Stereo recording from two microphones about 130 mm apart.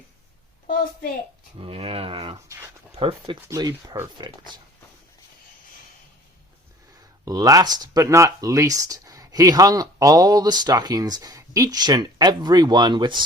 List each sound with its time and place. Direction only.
1.5 s speech: 50° right (ahead or behind)
3.5 s speech: 30° right (ahead or behind)
7.3 s speech: 30° right (ahead or behind)